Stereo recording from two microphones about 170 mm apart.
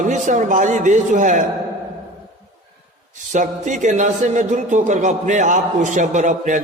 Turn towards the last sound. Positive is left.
turn(degrees=-45)  # may be behind; listen again after turning